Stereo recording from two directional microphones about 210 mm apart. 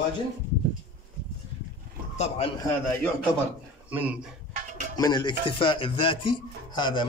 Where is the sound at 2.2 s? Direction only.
30° left (ahead or behind).